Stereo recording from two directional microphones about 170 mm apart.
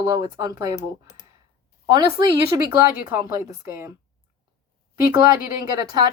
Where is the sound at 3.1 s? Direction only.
15° right (ahead or behind).